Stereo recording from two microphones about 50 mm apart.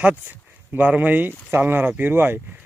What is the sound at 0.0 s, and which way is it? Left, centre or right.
Speech, right.